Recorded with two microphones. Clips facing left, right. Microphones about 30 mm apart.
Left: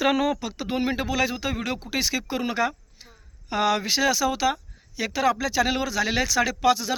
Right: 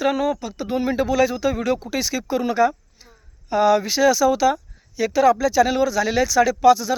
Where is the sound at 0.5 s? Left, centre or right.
Left.